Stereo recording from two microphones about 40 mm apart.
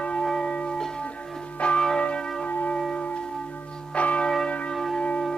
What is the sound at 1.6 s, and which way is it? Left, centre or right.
Church bell, left.